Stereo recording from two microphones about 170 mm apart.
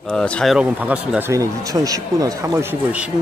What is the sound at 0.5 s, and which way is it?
Speech, 5° right (ahead or behind).